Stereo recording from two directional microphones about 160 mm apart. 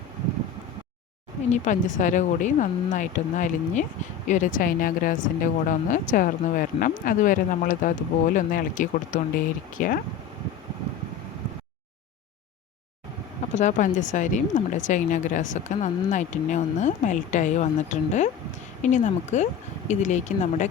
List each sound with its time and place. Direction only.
1.5 s speech: 50° left (ahead or behind)
13.5 s speech: 50° left (ahead or behind)